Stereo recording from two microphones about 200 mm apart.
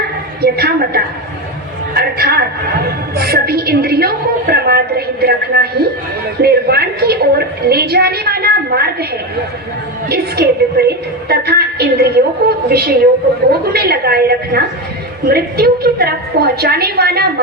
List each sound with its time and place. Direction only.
0.4 s a woman's voice: 50° right (ahead or behind)
10.1 s a woman's voice: 50° right (ahead or behind)